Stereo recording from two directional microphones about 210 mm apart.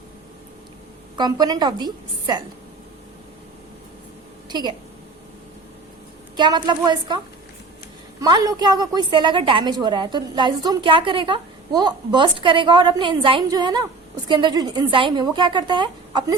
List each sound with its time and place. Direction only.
1.1 s a woman's voice: 20° right (ahead or behind)
4.4 s a sound: 20° right (ahead or behind)
6.3 s a woman's voice: 20° right (ahead or behind)
8.2 s a woman's voice: 20° right (ahead or behind)